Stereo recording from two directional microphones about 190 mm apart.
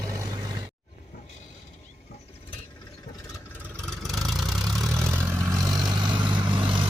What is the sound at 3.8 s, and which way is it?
Vehicle, centre (ahead or behind).